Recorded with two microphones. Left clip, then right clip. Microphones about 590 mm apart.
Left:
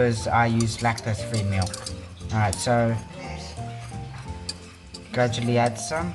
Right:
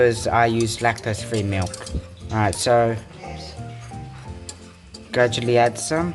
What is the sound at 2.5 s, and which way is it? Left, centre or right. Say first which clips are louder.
Speech: right 6 dB; centre.